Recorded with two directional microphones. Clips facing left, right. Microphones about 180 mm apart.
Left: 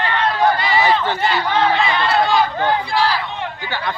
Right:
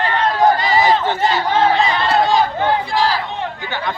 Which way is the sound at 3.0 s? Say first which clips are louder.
Right 1 dB; 40° right (ahead or behind).